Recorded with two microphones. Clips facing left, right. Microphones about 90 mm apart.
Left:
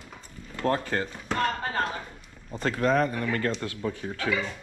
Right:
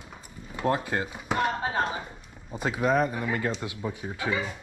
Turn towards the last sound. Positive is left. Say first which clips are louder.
# left 1 dB
turn(degrees=-15)  # may be behind; listen again after turning